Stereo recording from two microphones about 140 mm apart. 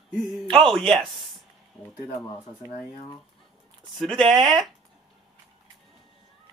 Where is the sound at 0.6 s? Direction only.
Centre (ahead or behind).